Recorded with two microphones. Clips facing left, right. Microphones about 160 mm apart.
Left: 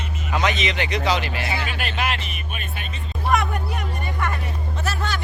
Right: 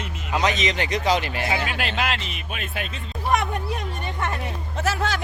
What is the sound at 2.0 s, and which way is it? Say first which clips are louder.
Speech: even; 90° right.